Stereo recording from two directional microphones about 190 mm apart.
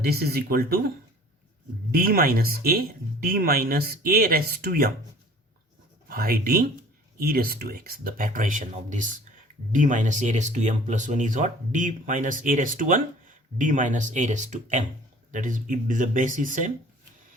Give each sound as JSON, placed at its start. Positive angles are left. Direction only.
{"t": 0.0, "sound": "speech", "side_deg": -55}
{"t": 1.9, "sound": "speech", "side_deg": -50}
{"t": 6.1, "sound": "speech", "side_deg": -50}